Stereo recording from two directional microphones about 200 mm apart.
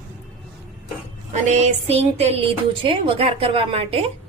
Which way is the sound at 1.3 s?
35° right (ahead or behind).